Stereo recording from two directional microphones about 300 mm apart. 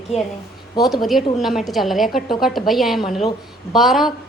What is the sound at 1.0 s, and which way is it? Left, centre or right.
A woman's voice, centre.